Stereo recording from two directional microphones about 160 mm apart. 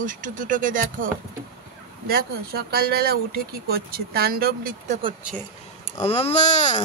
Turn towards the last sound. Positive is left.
turn(degrees=50)  # may be behind; listen again after turning